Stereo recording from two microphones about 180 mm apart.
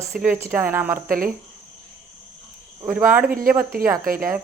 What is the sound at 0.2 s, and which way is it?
Speech, 10° right (ahead or behind).